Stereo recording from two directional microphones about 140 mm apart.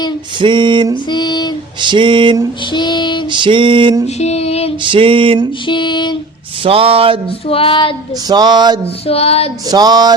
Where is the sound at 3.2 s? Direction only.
35° right (ahead or behind).